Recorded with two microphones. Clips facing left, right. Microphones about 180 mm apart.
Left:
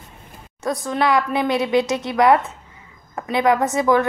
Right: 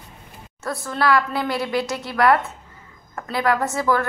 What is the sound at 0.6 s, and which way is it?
A woman's voice, 15° left (ahead or behind).